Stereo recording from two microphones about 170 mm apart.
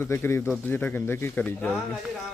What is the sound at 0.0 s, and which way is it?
Speech, 15° left (ahead or behind).